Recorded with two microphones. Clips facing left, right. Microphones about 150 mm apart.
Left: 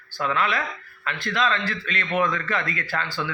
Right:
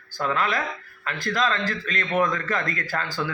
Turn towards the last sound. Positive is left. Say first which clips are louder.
# right 1 dB
turn(degrees=-40)  # may be behind; listen again after turning